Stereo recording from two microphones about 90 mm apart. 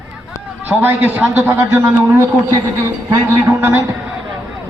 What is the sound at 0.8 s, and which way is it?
A man's voice, 25° right (ahead or behind).